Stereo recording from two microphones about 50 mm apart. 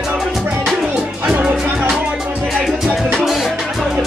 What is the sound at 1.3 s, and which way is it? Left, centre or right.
Music, right.